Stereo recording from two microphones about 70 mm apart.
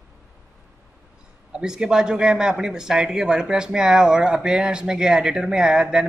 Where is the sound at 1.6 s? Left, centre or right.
Centre.